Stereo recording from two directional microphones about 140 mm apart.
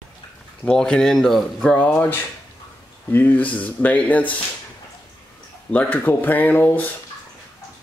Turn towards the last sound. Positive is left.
turn(degrees=15)  # may be behind; listen again after turning